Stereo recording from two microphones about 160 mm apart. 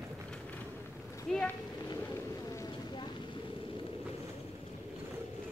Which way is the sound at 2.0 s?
20° left (ahead or behind).